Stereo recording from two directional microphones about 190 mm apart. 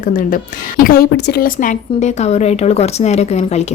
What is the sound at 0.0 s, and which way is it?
A woman's voice, 45° left (ahead or behind).